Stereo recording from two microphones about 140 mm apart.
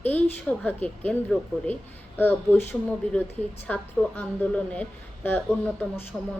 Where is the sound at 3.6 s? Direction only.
10° left (ahead or behind).